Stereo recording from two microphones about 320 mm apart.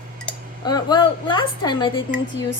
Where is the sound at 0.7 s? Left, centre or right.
Centre.